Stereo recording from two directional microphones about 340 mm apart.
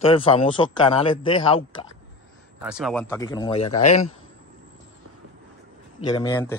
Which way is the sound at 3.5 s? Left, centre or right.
Left.